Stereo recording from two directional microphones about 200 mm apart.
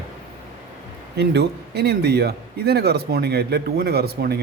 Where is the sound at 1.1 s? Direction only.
55° right (ahead or behind).